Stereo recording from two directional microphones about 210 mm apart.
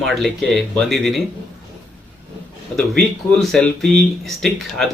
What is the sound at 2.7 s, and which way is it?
Speech, centre (ahead or behind).